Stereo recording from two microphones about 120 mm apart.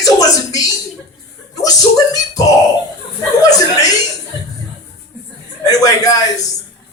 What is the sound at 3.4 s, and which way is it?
Beatboxing, 30° left (ahead or behind).